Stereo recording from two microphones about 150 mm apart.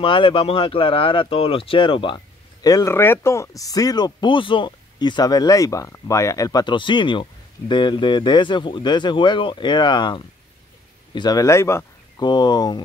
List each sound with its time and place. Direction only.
0.0 s speech: 35° left (ahead or behind)